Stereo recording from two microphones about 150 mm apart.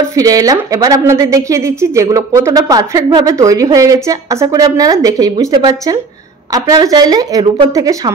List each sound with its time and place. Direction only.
0.1 s a woman's voice: 25° right (ahead or behind)